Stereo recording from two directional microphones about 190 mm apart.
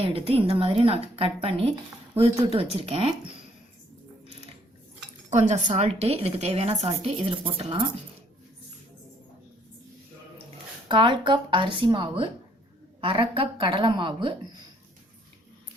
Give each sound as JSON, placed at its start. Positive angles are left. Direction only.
{"t": 0.0, "sound": "a woman's voice", "side_deg": -30}
{"t": 5.3, "sound": "a woman's voice", "side_deg": -40}
{"t": 10.8, "sound": "speech", "side_deg": -25}